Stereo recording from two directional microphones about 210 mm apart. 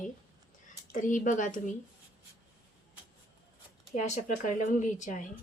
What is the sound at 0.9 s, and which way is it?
Speech, 35° left (ahead or behind).